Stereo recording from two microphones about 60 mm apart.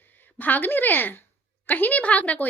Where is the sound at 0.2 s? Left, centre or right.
Left.